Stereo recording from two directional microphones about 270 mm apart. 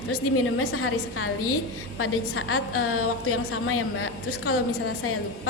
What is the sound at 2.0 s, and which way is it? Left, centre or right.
A woman's voice, left.